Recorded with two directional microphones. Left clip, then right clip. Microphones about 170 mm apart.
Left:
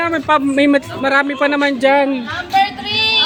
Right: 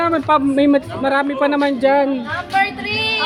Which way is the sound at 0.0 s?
Centre (ahead or behind).